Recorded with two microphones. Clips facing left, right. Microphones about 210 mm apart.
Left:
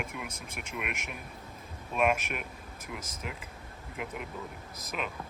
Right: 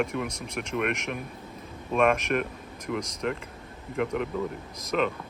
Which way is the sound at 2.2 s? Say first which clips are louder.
Right 11 dB; 5° left (ahead or behind).